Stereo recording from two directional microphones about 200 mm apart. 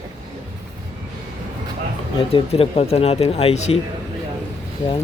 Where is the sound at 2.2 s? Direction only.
25° left (ahead or behind).